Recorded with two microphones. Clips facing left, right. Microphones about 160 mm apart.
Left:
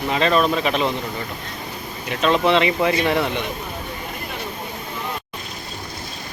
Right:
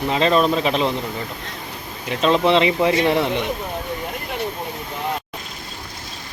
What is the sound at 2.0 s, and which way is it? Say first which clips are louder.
Speech: right 1 dB; 30° right (ahead or behind).